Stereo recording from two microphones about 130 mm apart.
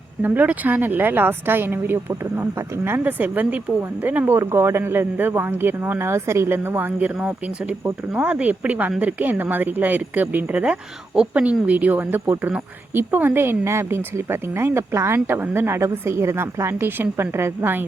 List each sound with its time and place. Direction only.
0.2 s speech: 15° right (ahead or behind)